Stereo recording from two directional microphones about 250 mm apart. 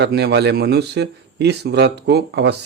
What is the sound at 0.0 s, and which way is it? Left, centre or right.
A man's voice, right.